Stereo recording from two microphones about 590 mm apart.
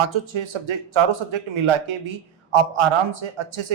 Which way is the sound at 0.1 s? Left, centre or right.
Right.